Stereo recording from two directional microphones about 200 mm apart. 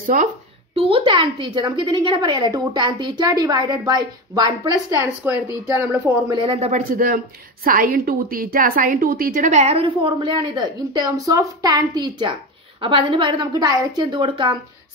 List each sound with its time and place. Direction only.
0.0 s speech: 40° right (ahead or behind)
0.7 s a woman's voice: 25° right (ahead or behind)
5.2 s speech: 10° right (ahead or behind)
6.4 s a woman's voice: 30° right (ahead or behind)
6.9 s a woman's voice: 45° right (ahead or behind); by 14.6 s 25° right (ahead or behind)